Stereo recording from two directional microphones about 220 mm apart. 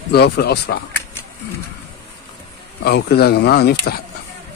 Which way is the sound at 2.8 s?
45° left (ahead or behind).